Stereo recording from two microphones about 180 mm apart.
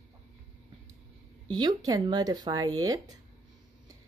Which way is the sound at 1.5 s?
25° right (ahead or behind).